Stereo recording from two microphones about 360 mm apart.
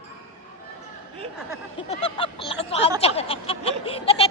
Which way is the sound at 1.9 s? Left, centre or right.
Centre.